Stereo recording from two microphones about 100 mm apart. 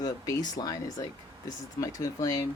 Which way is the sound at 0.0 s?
40° left (ahead or behind).